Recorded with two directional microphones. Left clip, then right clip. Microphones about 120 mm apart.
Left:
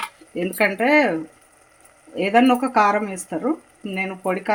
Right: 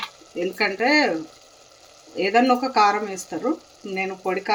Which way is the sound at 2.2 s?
40° left (ahead or behind).